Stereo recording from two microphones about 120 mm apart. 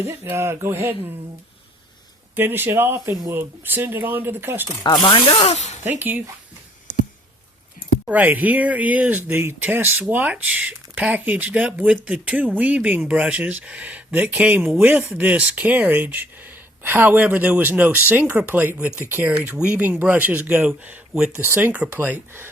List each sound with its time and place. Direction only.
0.3 s speech: 20° right (ahead or behind)
2.3 s speech: 15° right (ahead or behind)
5.0 s speech: 50° left (ahead or behind); by 5.8 s 70° left (ahead or behind)
6.0 s speech: 15° right (ahead or behind)
8.0 s speech: 15° right (ahead or behind)